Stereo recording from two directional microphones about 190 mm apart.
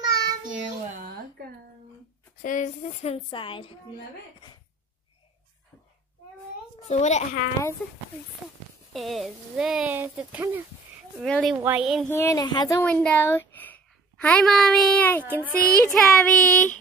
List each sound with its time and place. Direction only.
0.0 s child singing: 20° right (ahead or behind)
0.8 s a sound: 50° right (ahead or behind)
2.4 s a woman's voice: 40° left (ahead or behind)
6.8 s a woman's voice: 35° left (ahead or behind)
8.9 s speech: centre (ahead or behind)
11.1 s speech: centre (ahead or behind)
11.5 s speech: 10° right (ahead or behind)
12.1 s speech: 15° left (ahead or behind)
12.8 s speech: 5° left (ahead or behind)